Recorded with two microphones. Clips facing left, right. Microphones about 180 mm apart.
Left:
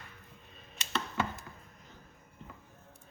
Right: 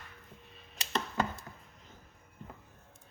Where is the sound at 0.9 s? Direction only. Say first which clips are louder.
Right 1 dB; 40° right (ahead or behind).